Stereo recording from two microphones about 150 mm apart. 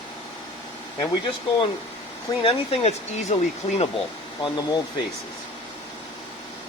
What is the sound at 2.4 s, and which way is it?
Speech, 40° left (ahead or behind).